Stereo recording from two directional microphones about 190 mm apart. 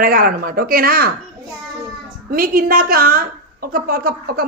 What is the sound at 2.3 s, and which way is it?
A woman's voice, 50° right (ahead or behind).